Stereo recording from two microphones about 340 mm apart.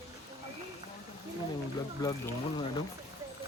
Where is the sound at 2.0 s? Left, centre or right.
Centre.